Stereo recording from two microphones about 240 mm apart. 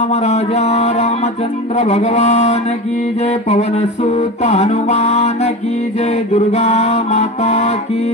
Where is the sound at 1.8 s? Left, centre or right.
Left.